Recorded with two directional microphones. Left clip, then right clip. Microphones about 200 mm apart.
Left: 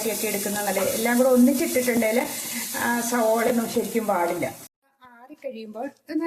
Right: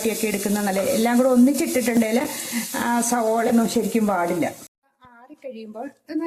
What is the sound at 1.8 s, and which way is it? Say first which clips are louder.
Frying: right 1 dB; 55° right (ahead or behind).